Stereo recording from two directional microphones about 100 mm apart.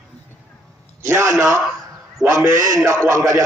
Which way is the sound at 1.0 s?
30° right (ahead or behind).